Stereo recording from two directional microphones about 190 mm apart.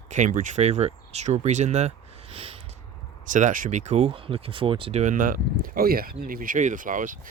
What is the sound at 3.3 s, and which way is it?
Speech, 45° right (ahead or behind).